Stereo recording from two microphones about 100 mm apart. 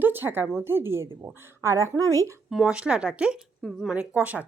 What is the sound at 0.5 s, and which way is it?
Speech, 25° right (ahead or behind).